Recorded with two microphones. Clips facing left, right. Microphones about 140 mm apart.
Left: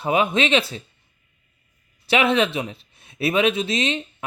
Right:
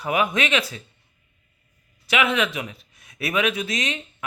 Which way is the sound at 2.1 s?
30° left (ahead or behind).